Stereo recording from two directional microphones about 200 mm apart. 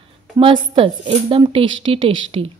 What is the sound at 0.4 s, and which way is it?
Speech, 25° right (ahead or behind).